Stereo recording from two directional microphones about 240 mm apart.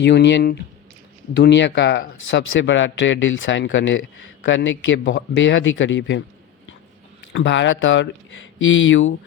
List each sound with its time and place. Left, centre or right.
0.0 s a man's voice: left
7.3 s a man's voice: left